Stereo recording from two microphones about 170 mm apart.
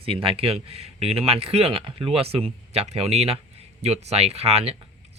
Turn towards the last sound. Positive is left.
turn(degrees=-35)  # may be behind; listen again after turning